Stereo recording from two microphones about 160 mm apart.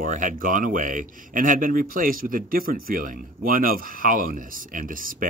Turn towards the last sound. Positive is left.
turn(degrees=-60)  # may be behind; listen again after turning